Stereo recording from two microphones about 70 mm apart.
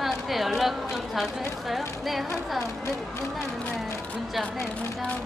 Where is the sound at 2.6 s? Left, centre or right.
Left.